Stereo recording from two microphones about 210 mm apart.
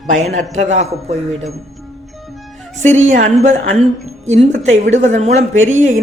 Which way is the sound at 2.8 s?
35° right (ahead or behind).